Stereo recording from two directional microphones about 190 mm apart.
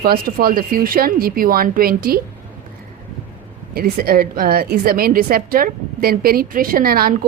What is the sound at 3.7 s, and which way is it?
A woman's voice, 50° right (ahead or behind).